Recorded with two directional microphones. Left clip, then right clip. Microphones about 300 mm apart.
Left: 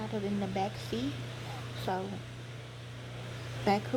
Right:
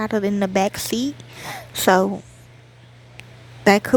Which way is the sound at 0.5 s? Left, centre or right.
Right.